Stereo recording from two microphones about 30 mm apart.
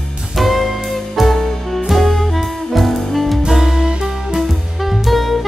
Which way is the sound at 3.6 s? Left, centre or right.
Centre.